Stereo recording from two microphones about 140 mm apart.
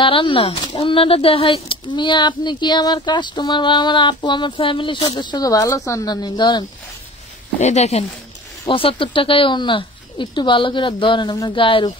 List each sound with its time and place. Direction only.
0.0 s speech: 40° left (ahead or behind)
7.6 s speech: 55° left (ahead or behind)
8.6 s speech: 40° left (ahead or behind)